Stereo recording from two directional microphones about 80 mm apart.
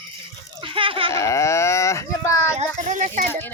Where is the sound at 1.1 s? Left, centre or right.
Left.